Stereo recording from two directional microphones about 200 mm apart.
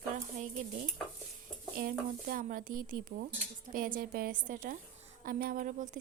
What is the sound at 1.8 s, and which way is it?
A woman's voice, 45° right (ahead or behind).